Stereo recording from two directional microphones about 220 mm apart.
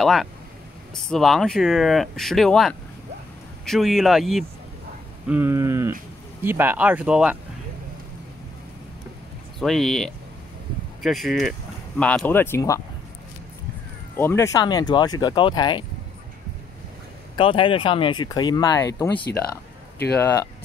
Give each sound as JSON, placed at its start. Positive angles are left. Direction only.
{"t": 0.0, "sound": "speech", "side_deg": 0}
{"t": 9.6, "sound": "speech", "side_deg": 0}
{"t": 14.1, "sound": "speech", "side_deg": 10}
{"t": 17.4, "sound": "speech", "side_deg": 25}